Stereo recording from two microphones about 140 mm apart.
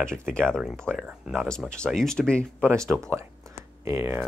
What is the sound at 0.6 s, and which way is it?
Speech, 5° right (ahead or behind).